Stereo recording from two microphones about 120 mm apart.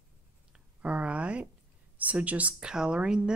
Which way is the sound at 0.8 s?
10° right (ahead or behind).